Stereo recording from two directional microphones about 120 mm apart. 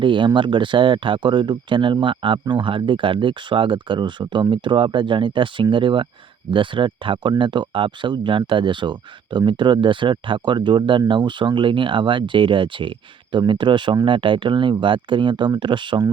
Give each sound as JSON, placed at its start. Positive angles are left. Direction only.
{"t": 0.0, "sound": "speech", "side_deg": -45}